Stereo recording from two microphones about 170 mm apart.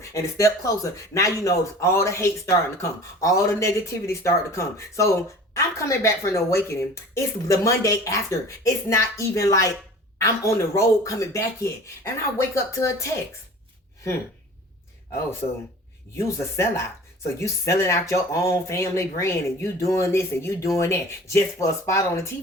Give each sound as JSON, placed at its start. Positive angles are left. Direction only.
{"t": 0.1, "sound": "a woman's voice", "side_deg": 20}
{"t": 16.1, "sound": "a woman's voice", "side_deg": 15}